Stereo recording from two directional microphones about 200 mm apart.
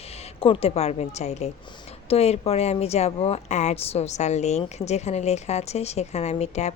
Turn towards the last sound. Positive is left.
turn(degrees=35)  # may be behind; listen again after turning